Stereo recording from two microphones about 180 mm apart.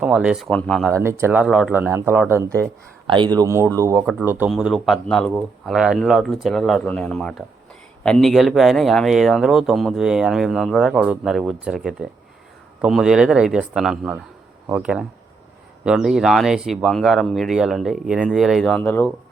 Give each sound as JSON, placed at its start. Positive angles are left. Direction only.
{"t": 0.0, "sound": "speech", "side_deg": -5}
{"t": 0.9, "sound": "speech", "side_deg": -15}
{"t": 1.7, "sound": "speech", "side_deg": -15}
{"t": 3.1, "sound": "speech", "side_deg": -25}